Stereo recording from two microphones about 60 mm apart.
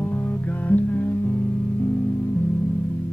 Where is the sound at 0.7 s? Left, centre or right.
Left.